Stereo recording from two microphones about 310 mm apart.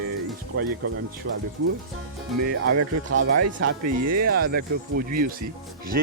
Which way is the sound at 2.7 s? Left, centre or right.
Right.